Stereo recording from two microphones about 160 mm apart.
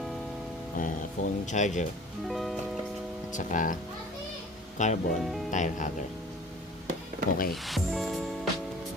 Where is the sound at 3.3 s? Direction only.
50° left (ahead or behind).